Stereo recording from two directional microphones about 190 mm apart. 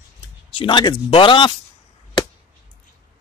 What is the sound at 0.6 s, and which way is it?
Speech, 25° left (ahead or behind).